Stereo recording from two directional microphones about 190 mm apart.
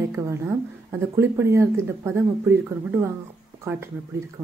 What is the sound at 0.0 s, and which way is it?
Speech, 15° right (ahead or behind).